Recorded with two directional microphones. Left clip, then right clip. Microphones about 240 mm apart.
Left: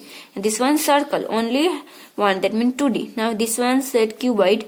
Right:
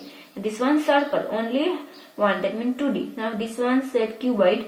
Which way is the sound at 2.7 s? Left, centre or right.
Left.